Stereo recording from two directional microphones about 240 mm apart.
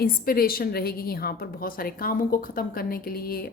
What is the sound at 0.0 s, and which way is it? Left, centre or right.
A woman's voice, left.